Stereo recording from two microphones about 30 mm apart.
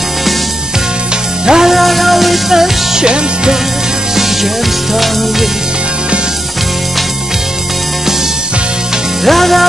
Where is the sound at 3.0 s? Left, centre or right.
Right.